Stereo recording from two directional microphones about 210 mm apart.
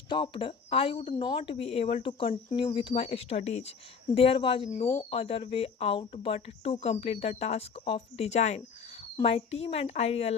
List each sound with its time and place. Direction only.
0.1 s speech: 25° left (ahead or behind)